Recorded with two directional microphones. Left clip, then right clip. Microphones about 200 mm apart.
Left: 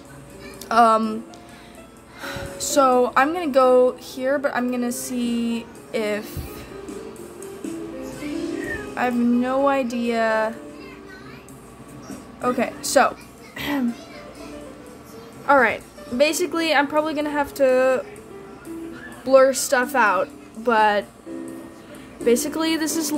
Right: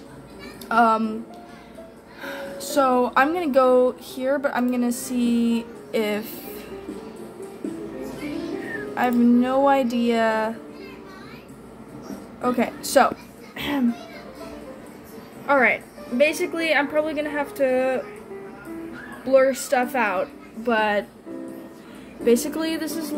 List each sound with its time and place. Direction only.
0.7 s a woman's voice: 15° left (ahead or behind)
2.2 s speech: 15° left (ahead or behind)
8.9 s speech: centre (ahead or behind)
12.4 s speech: centre (ahead or behind)
13.6 s a sound: 5° left (ahead or behind)
15.4 s a woman's voice: 15° left (ahead or behind)
19.2 s a woman's voice: 20° left (ahead or behind)
22.2 s a woman's voice: 10° left (ahead or behind)